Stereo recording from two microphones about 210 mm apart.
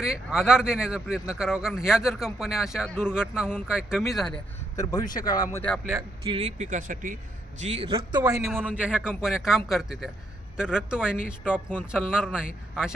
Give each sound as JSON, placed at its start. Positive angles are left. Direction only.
{"t": 0.0, "sound": "a man's voice", "side_deg": -5}
{"t": 4.8, "sound": "speech", "side_deg": 15}
{"t": 5.5, "sound": "a man's voice", "side_deg": 5}
{"t": 6.2, "sound": "speech", "side_deg": -30}
{"t": 7.6, "sound": "a man's voice", "side_deg": -30}
{"t": 8.4, "sound": "a man's voice", "side_deg": -5}